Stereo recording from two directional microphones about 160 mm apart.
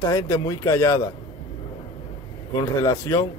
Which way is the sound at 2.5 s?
20° left (ahead or behind).